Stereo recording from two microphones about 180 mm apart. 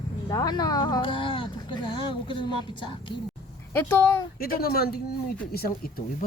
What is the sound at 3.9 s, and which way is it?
Speech, 15° left (ahead or behind).